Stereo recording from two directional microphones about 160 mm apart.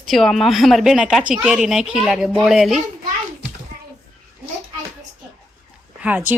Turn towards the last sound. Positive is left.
turn(degrees=-10)  # may be behind; listen again after turning